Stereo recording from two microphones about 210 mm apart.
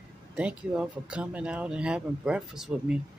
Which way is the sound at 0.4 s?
5° right (ahead or behind).